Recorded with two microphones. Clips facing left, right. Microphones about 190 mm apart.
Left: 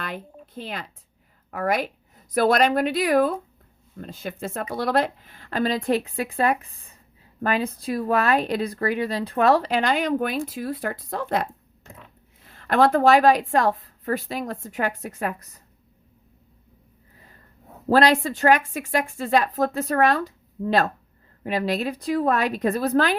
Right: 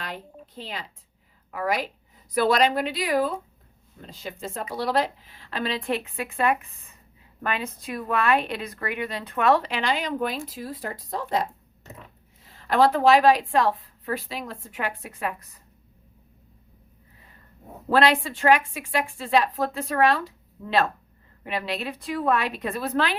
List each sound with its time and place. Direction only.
0.0 s a sound: 55° left (ahead or behind)
1.5 s a woman's voice: 50° left (ahead or behind)
12.5 s a woman's voice: 55° left (ahead or behind)
17.8 s a woman's voice: 40° left (ahead or behind)